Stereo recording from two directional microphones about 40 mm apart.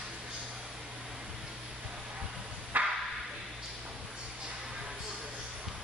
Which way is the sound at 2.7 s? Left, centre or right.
Right.